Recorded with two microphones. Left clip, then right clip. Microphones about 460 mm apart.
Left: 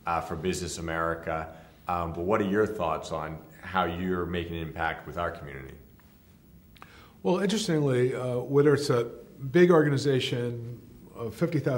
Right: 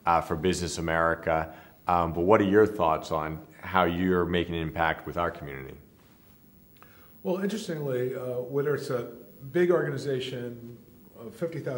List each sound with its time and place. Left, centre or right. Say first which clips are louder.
0.0 s speech: right 5 dB; right
6.8 s a man's voice: left 6 dB; left